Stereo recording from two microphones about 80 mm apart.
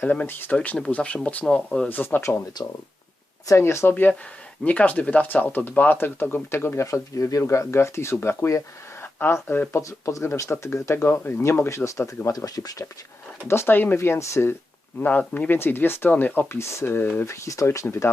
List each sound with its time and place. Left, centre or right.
0.0 s speech: left
1.9 s speech: left
3.4 s speech: left
9.8 s speech: left
12.5 s speech: left
13.5 s speech: left
15.3 s speech: centre
17.2 s speech: left